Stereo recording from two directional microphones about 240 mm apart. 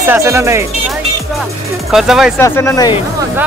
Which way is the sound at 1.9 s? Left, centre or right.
Centre.